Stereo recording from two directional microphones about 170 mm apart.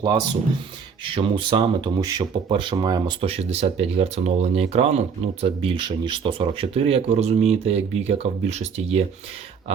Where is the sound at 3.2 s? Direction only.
35° right (ahead or behind).